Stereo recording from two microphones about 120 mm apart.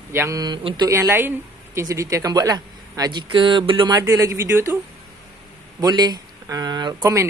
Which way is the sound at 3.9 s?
25° right (ahead or behind).